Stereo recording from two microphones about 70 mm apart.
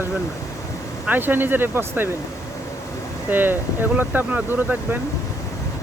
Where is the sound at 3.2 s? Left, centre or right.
Right.